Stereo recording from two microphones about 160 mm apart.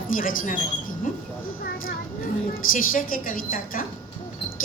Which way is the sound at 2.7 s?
60° left (ahead or behind).